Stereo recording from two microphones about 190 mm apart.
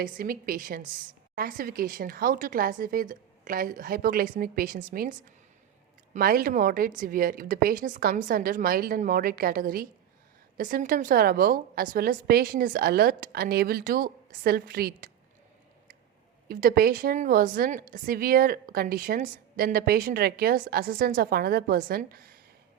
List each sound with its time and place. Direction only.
0.0 s a woman's voice: 50° right (ahead or behind)
6.1 s a woman's voice: 50° right (ahead or behind)
16.5 s a woman's voice: 50° right (ahead or behind)